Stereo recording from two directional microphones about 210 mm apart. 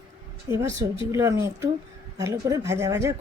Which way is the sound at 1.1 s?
15° right (ahead or behind).